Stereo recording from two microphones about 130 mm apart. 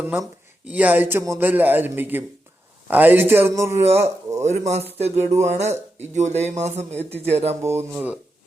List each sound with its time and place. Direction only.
0.0 s speech: 15° right (ahead or behind)
4.4 s speech: 60° right (ahead or behind)
7.6 s speech: 20° right (ahead or behind)